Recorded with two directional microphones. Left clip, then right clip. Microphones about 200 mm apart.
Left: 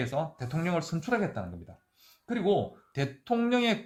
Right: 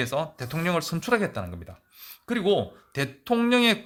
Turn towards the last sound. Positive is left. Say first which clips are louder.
# right 6 dB
turn(degrees=-30)  # may be behind; listen again after turning